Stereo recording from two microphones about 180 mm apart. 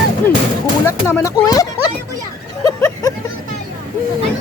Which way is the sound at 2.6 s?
20° left (ahead or behind).